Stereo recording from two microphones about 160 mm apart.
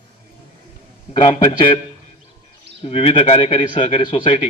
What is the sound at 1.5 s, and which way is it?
Speech, 30° left (ahead or behind).